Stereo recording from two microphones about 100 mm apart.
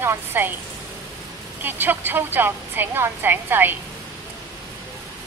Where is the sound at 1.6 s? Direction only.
20° right (ahead or behind).